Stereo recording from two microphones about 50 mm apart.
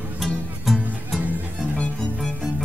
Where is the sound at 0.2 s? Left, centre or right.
Centre.